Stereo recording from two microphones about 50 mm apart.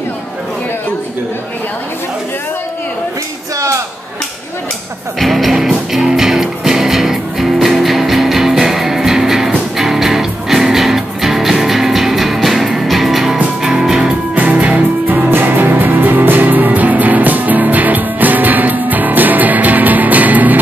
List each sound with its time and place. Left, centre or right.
5.2 s music: centre
14.3 s music: right
15.2 s music: right